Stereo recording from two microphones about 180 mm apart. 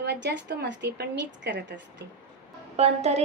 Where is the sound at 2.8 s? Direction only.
35° right (ahead or behind).